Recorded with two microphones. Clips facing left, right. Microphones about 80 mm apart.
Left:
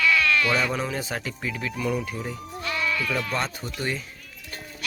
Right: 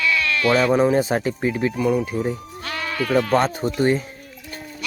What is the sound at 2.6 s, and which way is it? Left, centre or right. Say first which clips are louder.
Speech: right 3 dB; right.